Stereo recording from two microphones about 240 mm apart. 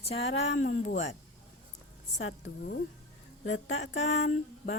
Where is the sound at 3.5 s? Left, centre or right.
Left.